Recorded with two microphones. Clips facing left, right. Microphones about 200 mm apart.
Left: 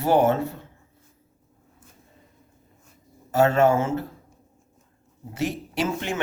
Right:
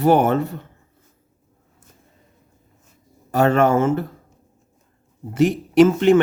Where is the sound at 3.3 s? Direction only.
60° right (ahead or behind).